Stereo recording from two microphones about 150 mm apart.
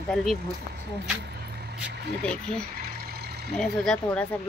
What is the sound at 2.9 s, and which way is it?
Vehicle, 90° right.